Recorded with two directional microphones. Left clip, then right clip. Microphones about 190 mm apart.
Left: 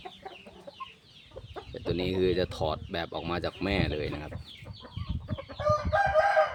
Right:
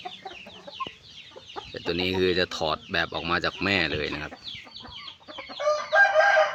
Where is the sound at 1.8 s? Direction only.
5° left (ahead or behind).